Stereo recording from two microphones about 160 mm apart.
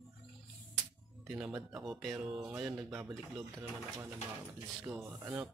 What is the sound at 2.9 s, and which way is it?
Speech, 5° right (ahead or behind).